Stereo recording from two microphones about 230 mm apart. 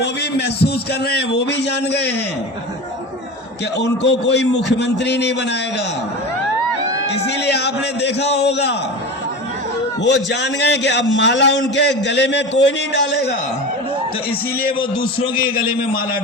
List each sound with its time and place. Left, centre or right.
0.0 s a man's voice: left
3.8 s a man's voice: left
7.4 s a man's voice: left
10.0 s a man's voice: left
14.8 s a man's voice: left